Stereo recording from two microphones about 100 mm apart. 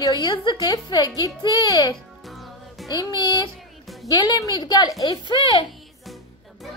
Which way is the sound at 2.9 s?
45° left (ahead or behind).